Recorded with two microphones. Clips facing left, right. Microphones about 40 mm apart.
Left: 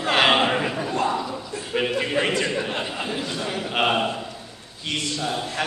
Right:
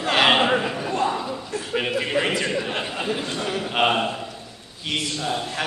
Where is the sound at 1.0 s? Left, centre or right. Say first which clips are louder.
Even; centre.